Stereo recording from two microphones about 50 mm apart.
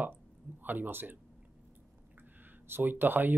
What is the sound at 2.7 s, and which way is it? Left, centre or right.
Speech, right.